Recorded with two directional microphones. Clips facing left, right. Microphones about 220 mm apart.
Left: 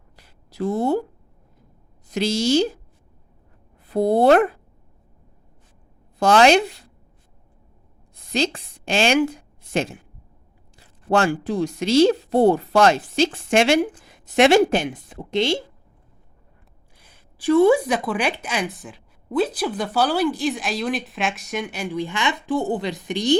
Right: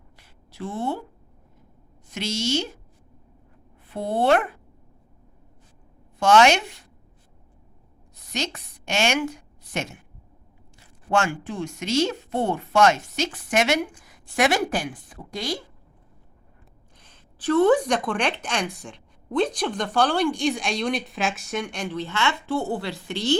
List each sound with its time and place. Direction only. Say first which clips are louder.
0.5 s speech: left 8 dB; 40° left (ahead or behind)
2.0 s speech: left 7 dB; 35° left (ahead or behind)
3.8 s speech: left 6 dB; 40° left (ahead or behind)
6.1 s speech: left 3 dB; 35° left (ahead or behind)
8.3 s a woman's voice: left 7 dB; 30° left (ahead or behind)
11.1 s a woman's voice: left 5 dB; 35° left (ahead or behind)
17.0 s speech: left 3 dB; 10° left (ahead or behind)